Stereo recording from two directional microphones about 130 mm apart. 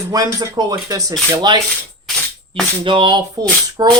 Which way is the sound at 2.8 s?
40° right (ahead or behind).